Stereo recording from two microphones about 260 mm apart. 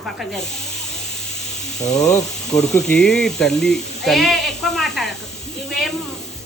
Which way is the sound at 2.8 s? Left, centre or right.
Centre.